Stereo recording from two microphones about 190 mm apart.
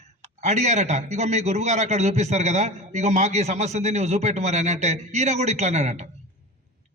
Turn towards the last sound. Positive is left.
turn(degrees=-35)  # may be behind; listen again after turning